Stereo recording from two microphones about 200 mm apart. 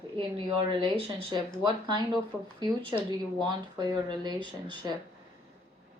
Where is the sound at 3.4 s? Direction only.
20° right (ahead or behind).